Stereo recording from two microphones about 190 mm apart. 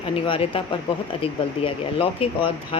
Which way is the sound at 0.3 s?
30° left (ahead or behind).